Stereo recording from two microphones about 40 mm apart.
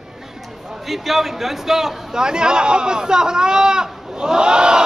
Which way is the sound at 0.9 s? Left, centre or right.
Centre.